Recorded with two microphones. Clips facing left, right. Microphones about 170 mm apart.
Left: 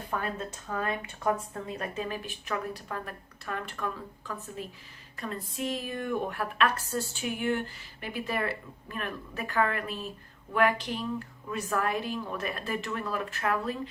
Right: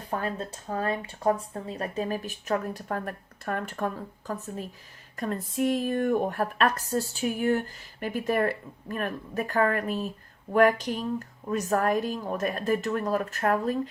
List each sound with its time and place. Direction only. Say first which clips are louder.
0.1 s a woman's voice: right 3 dB; 35° right (ahead or behind)